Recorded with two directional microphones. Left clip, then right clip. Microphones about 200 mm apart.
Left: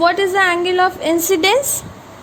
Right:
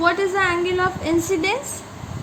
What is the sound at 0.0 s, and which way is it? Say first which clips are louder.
A woman's voice: left 5 dB; 40° left (ahead or behind).